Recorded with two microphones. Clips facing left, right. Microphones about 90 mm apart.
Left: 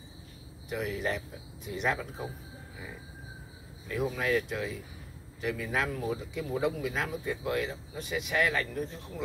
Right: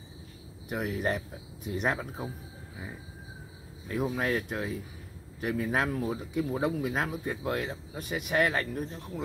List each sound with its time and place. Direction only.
0.7 s speech: 45° right (ahead or behind)
3.9 s speech: 35° right (ahead or behind)